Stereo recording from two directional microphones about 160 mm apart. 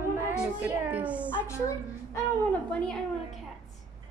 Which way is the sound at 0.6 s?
10° right (ahead or behind).